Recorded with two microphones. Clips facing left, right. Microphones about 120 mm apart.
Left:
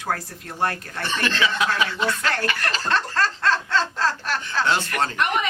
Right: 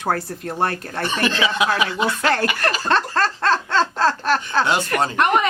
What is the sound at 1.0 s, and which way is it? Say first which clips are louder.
Speech: right 3 dB; 15° right (ahead or behind).